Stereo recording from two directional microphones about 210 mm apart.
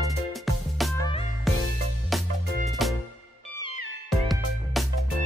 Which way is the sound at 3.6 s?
80° right.